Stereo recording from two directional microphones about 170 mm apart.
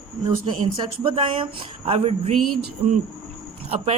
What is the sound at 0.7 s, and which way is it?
Speech, 30° right (ahead or behind).